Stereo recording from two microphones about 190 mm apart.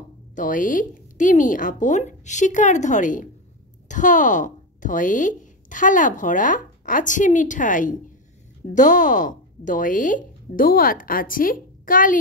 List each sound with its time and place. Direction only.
0.4 s a woman's voice: 45° left (ahead or behind)